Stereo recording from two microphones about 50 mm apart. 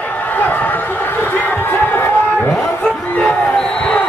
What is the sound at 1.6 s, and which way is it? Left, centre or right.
Crowd, left.